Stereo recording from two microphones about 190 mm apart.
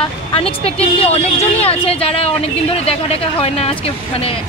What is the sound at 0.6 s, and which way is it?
A woman's voice, 30° left (ahead or behind).